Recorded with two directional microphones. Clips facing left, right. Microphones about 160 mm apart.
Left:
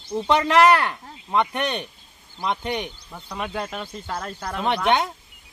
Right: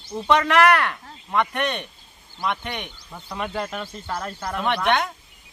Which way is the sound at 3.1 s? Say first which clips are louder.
Right 1 dB; centre (ahead or behind).